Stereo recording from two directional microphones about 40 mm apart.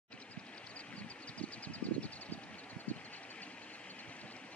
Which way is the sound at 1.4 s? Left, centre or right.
Left.